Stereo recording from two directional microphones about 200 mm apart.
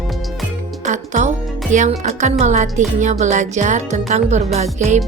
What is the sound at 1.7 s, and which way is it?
A woman's voice, 40° right (ahead or behind).